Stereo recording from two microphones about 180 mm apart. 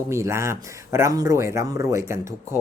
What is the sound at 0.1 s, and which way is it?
Speech, 15° right (ahead or behind).